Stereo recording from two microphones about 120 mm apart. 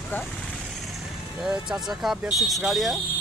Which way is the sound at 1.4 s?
5° right (ahead or behind).